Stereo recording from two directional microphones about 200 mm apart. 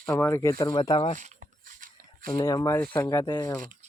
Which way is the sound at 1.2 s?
40° right (ahead or behind).